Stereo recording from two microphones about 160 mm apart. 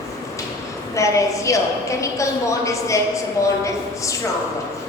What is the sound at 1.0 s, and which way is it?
A woman's voice, 20° left (ahead or behind).